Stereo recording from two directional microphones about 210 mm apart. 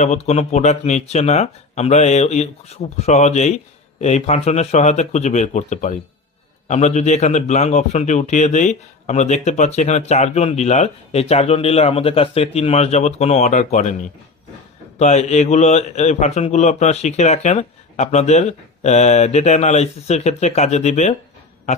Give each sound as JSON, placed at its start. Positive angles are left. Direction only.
{"t": 0.0, "sound": "a man's voice", "side_deg": 30}